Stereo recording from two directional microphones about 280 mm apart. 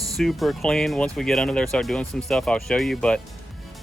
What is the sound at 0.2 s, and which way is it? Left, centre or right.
Speech, centre.